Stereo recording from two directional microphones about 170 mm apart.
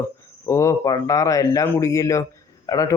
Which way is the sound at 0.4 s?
15° left (ahead or behind).